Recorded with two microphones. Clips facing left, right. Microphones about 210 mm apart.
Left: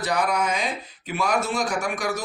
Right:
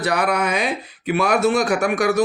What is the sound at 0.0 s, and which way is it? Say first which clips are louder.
Speech: right 4 dB; 65° right (ahead or behind).